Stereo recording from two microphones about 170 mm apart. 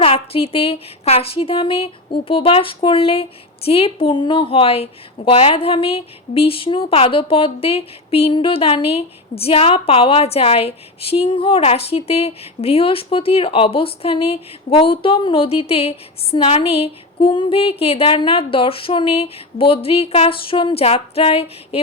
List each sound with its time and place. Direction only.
0.0 s a woman's voice: 35° left (ahead or behind)